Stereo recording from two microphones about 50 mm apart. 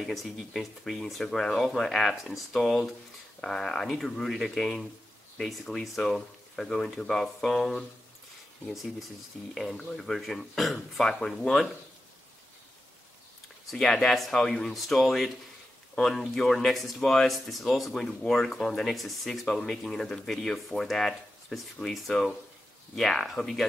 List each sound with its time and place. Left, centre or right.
0.0 s speech: centre
9.5 s speech: centre
9.8 s speech: centre
10.1 s speech: centre
13.7 s speech: centre
19.4 s speech: centre